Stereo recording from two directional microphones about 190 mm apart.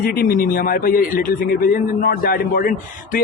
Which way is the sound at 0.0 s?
50° left (ahead or behind).